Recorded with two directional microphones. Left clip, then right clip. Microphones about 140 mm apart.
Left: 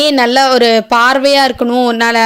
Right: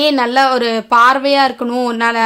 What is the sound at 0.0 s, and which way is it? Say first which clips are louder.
Speech: left 3 dB; 30° left (ahead or behind).